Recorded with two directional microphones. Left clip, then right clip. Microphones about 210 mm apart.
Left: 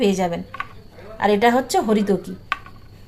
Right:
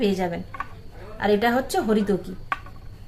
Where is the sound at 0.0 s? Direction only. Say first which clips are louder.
Left 4 dB; 20° left (ahead or behind).